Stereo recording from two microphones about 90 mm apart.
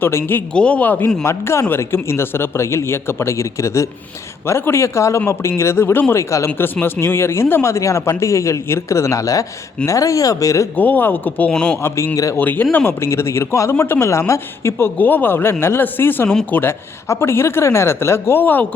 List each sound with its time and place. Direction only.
0.0 s speech: 25° left (ahead or behind)
0.5 s speech: 15° left (ahead or behind); by 10.7 s 40° left (ahead or behind)
10.8 s a man's voice: 20° left (ahead or behind)
11.8 s speech: 30° left (ahead or behind)
12.4 s speech: 20° left (ahead or behind)